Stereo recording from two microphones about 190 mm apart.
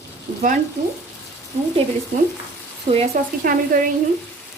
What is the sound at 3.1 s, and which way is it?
Speech, 50° right (ahead or behind).